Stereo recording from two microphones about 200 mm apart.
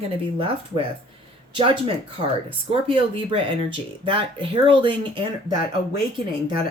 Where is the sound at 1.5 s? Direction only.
25° right (ahead or behind).